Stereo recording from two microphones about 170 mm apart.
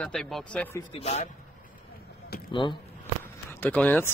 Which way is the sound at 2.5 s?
30° left (ahead or behind).